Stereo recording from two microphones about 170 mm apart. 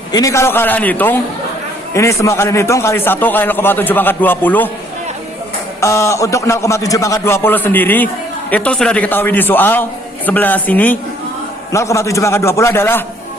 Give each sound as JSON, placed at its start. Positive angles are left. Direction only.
{"t": 0.1, "sound": "a man's voice", "side_deg": 20}
{"t": 5.8, "sound": "a man's voice", "side_deg": 15}